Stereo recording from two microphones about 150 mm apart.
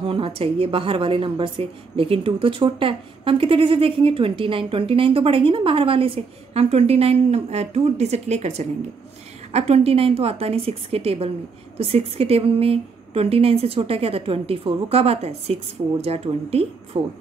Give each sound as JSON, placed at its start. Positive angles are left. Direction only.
{"t": 0.0, "sound": "a woman's voice", "side_deg": -35}